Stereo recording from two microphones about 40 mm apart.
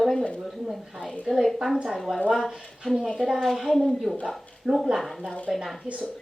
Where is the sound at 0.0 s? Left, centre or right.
Centre.